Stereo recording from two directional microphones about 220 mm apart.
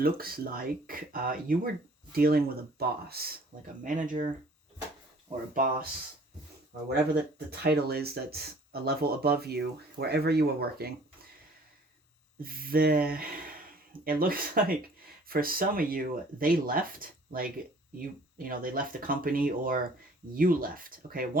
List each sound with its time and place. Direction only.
0.0 s speech: 45° right (ahead or behind)
5.5 s speech: 40° right (ahead or behind)
12.4 s speech: 40° right (ahead or behind)